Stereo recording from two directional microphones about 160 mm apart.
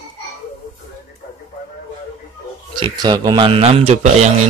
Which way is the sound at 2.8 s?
30° right (ahead or behind).